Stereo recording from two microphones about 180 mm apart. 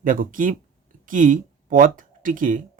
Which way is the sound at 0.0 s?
50° right (ahead or behind).